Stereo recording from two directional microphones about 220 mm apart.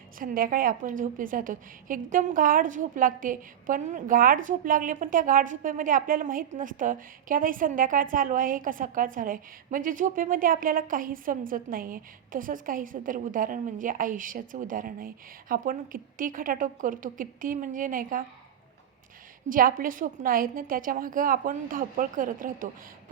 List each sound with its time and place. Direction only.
0.2 s a woman's voice: 40° right (ahead or behind)
19.5 s a woman's voice: 40° right (ahead or behind)